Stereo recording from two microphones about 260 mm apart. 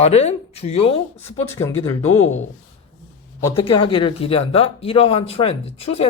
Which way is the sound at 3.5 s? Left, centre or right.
Centre.